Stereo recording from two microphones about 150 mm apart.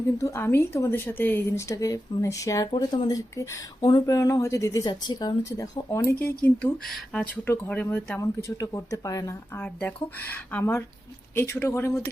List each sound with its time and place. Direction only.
0.2 s speech: 20° left (ahead or behind)